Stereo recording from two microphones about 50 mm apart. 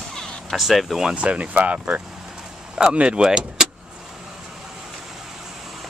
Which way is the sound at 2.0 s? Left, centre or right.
Centre.